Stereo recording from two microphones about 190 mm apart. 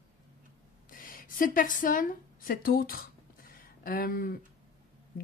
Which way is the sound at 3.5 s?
50° left (ahead or behind).